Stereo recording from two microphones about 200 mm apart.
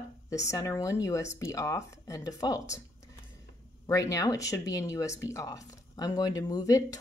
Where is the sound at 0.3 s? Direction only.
15° left (ahead or behind).